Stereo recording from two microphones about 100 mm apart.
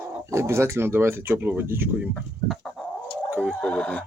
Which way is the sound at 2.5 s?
Centre (ahead or behind).